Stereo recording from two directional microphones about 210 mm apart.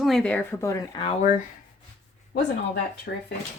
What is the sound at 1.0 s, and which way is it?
Speech, 35° left (ahead or behind).